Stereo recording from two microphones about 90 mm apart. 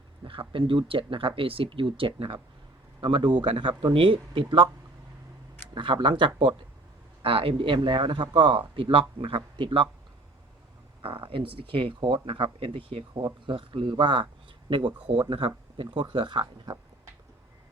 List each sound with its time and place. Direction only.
0.3 s speech: 75° right (ahead or behind)
3.0 s speech: 70° right (ahead or behind)
5.7 s speech: 65° right (ahead or behind)
7.2 s speech: 90° right; by 9.9 s 70° right (ahead or behind)
11.0 s speech: 85° right
13.4 s speech: 65° right (ahead or behind)